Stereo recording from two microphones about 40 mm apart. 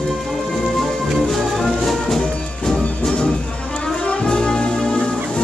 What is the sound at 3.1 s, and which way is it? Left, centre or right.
Music, left.